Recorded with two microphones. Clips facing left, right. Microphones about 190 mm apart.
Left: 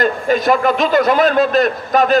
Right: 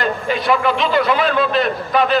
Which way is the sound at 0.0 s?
45° left (ahead or behind).